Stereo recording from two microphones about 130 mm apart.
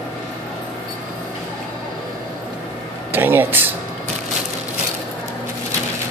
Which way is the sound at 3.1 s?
15° right (ahead or behind).